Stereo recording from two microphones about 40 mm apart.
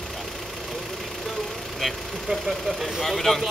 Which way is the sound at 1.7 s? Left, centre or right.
Centre.